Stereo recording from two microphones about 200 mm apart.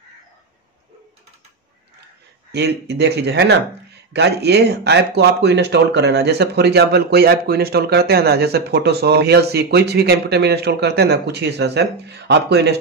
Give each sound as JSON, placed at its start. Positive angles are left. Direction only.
{"t": 2.5, "sound": "speech", "side_deg": -55}